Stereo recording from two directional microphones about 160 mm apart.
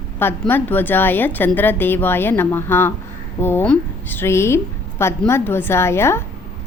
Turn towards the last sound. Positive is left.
turn(degrees=15)  # may be behind; listen again after turning